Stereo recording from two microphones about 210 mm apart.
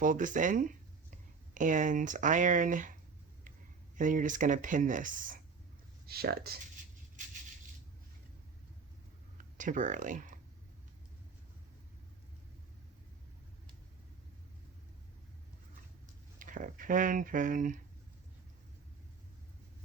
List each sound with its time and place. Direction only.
0.0 s speech: 40° right (ahead or behind)
3.9 s speech: 40° right (ahead or behind)
6.1 s speech: 50° right (ahead or behind)
9.4 s speech: 40° right (ahead or behind)
16.4 s speech: 40° right (ahead or behind)